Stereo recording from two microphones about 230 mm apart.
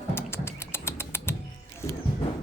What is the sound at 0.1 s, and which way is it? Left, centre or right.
Bird, centre.